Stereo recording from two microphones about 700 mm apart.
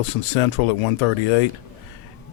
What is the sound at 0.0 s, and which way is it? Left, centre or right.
Speech, left.